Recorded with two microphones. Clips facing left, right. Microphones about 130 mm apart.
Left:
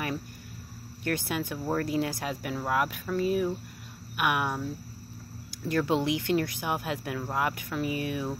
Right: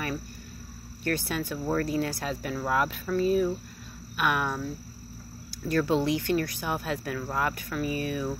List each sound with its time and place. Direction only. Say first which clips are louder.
1.0 s speech: right 1 dB; 15° left (ahead or behind)
5.7 s speech: right 1 dB; 15° left (ahead or behind)